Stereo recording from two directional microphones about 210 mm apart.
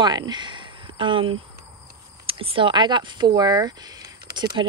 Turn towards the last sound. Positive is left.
turn(degrees=-20)  # may be behind; listen again after turning